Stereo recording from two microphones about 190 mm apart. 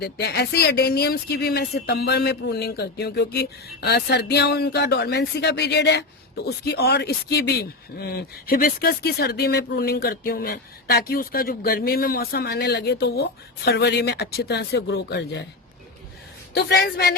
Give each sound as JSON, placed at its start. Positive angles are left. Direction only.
{"t": 0.0, "sound": "speech", "side_deg": 60}
{"t": 16.6, "sound": "speech", "side_deg": 60}